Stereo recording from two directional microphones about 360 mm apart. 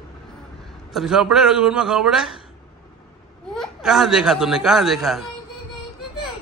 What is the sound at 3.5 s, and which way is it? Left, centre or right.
Speech, centre.